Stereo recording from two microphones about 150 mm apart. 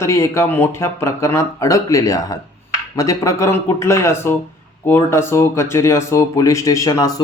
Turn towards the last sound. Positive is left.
turn(degrees=25)  # may be behind; listen again after turning